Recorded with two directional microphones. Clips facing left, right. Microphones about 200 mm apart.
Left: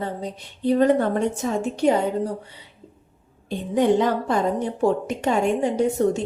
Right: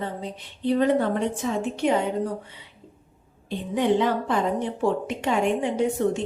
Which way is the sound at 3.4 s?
45° left (ahead or behind).